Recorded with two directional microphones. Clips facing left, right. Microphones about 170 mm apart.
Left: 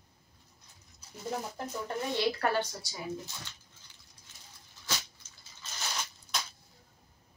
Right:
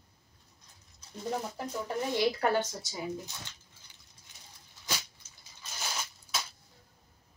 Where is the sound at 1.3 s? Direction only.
5° right (ahead or behind).